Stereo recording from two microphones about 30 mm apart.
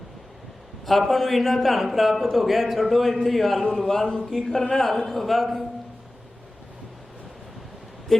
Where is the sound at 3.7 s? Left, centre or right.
Centre.